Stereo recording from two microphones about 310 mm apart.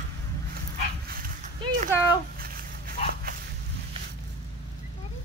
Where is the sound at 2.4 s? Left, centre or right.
Right.